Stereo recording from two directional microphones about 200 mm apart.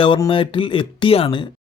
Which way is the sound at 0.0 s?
25° left (ahead or behind).